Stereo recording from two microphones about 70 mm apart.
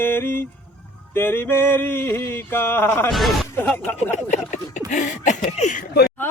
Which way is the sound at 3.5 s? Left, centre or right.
Left.